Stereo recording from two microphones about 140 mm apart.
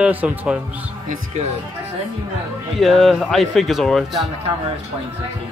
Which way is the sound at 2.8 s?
Centre (ahead or behind).